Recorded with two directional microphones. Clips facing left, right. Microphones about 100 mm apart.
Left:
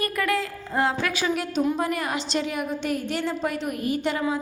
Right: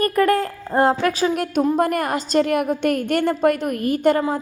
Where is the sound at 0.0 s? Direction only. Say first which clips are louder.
Right 8 dB; 45° right (ahead or behind).